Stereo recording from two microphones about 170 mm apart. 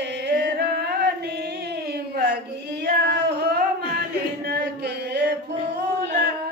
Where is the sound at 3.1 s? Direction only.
80° right.